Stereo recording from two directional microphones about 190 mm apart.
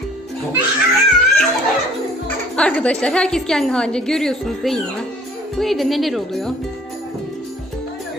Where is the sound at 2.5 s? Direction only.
5° left (ahead or behind).